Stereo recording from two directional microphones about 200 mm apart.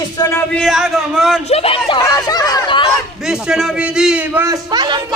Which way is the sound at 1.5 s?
30° left (ahead or behind).